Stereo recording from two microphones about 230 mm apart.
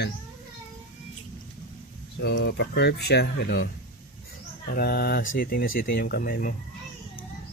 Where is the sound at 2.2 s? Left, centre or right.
Left.